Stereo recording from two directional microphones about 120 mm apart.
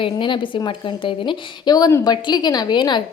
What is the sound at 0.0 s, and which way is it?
A woman's voice, 40° left (ahead or behind).